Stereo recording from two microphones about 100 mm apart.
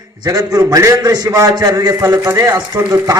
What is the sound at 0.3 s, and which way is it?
A man's voice, 35° right (ahead or behind).